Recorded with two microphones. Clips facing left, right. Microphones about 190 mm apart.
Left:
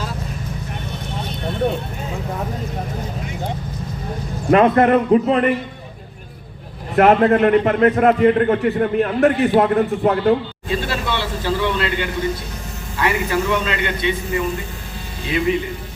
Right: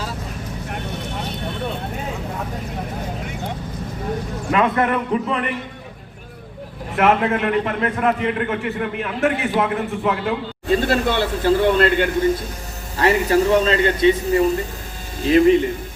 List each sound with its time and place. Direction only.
4.5 s a man's voice: 40° left (ahead or behind)
6.9 s a man's voice: 40° left (ahead or behind)
10.7 s speech: 45° right (ahead or behind)
13.0 s a man's voice: 35° right (ahead or behind)